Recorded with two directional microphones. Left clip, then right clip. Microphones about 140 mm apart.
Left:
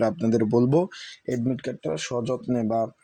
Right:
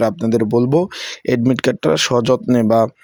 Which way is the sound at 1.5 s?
90° right.